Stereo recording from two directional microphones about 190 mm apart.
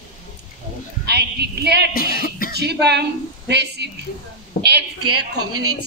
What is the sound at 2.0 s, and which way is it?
Music, 50° left (ahead or behind).